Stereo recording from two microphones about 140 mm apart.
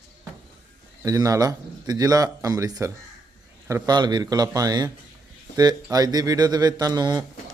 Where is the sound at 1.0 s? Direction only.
25° right (ahead or behind).